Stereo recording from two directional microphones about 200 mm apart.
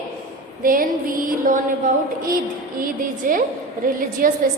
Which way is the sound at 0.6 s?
45° right (ahead or behind).